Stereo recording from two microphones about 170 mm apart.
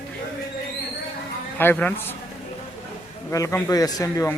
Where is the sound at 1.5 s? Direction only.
10° left (ahead or behind).